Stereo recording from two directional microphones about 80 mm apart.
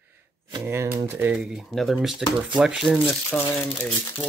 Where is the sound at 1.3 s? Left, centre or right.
Centre.